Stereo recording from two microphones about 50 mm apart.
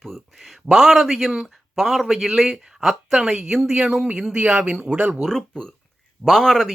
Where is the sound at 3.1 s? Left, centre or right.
Centre.